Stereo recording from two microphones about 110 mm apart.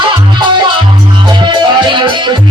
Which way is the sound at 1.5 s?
45° right (ahead or behind).